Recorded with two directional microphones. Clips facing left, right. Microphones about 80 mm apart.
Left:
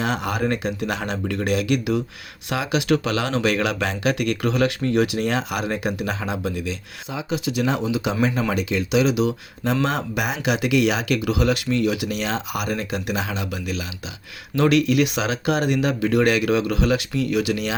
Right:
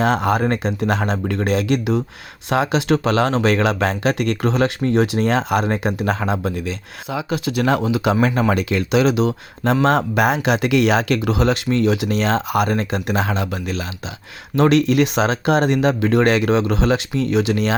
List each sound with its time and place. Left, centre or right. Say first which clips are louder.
0.0 s speech: right 6 dB; right
6.1 s speech: right 4 dB; right
7.1 s speech: right 4 dB; right
7.3 s speech: right 4 dB; right